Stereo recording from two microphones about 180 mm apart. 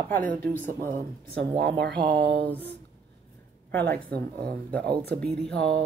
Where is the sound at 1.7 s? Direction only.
60° right (ahead or behind).